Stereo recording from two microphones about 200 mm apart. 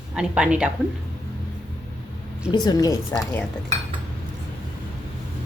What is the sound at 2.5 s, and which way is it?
Speech, 20° left (ahead or behind).